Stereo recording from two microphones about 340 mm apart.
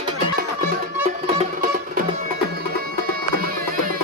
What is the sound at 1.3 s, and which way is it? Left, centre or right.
Music, right.